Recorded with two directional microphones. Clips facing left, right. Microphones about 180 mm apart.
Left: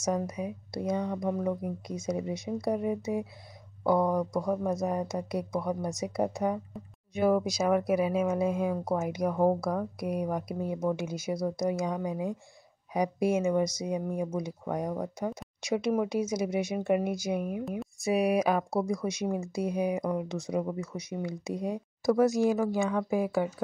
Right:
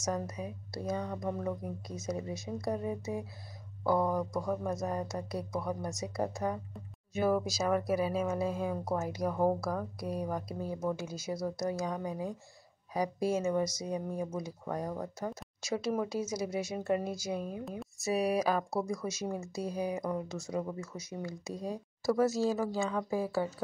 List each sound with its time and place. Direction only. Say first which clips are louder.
0.0 s speech: left 5 dB; 15° left (ahead or behind)
11.3 s speech: left 3 dB; 5° right (ahead or behind)
11.6 s speech: left 4 dB; 15° left (ahead or behind)
17.6 s a sound: left 6 dB; centre (ahead or behind)
18.0 s speech: left 4 dB; 15° left (ahead or behind)